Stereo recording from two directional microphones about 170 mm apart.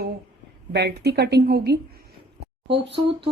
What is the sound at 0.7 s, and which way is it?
A woman's voice, 75° right (ahead or behind).